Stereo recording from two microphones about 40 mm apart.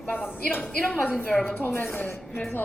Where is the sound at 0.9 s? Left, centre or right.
Left.